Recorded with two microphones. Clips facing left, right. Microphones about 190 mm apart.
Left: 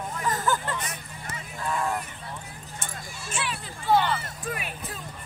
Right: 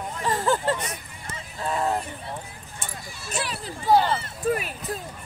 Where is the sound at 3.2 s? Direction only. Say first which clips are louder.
Right 3 dB; 40° right (ahead or behind).